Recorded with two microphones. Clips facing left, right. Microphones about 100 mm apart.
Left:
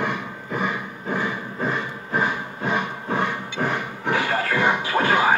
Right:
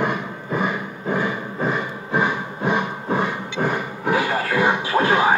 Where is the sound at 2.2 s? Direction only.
20° right (ahead or behind).